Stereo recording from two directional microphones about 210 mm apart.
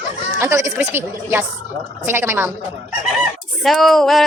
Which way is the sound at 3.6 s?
Centre (ahead or behind).